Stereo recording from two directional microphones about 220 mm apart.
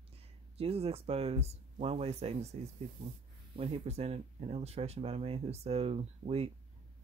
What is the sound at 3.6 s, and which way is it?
Speech, 30° right (ahead or behind).